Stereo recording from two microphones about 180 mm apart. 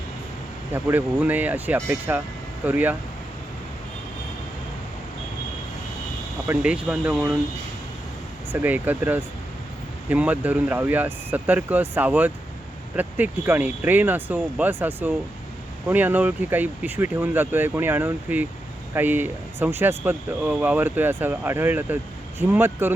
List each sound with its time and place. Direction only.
0.7 s speech: 10° right (ahead or behind)
6.5 s speech: 5° right (ahead or behind)
8.5 s speech: 10° right (ahead or behind)